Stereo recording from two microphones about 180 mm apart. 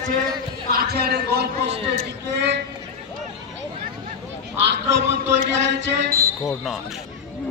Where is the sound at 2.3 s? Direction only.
75° right (ahead or behind).